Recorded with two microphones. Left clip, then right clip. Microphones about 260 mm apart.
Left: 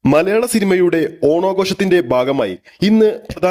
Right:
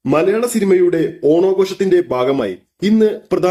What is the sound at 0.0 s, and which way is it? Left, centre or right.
Speech, left.